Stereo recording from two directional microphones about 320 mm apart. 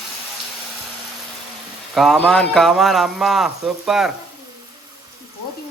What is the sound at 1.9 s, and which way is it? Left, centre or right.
Speech, centre.